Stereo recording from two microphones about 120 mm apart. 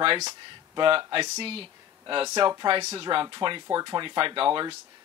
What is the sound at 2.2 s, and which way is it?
Speech, 35° right (ahead or behind).